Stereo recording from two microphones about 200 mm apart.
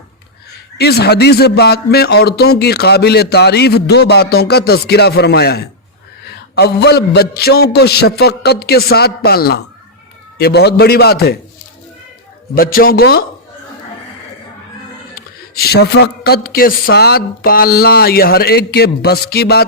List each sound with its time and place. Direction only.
0.8 s a man's voice: 55° left (ahead or behind)
12.5 s a man's voice: 45° left (ahead or behind)
15.6 s a man's voice: 55° left (ahead or behind)